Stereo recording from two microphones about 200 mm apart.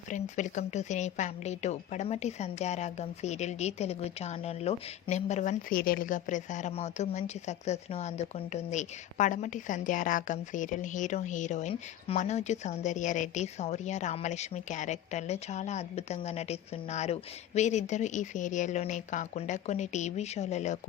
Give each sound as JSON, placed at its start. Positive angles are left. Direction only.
{"t": 0.1, "sound": "a woman's voice", "side_deg": 40}